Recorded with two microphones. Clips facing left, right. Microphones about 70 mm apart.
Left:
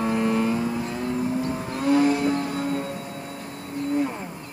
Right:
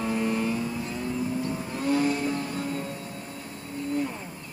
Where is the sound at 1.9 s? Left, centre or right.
Left.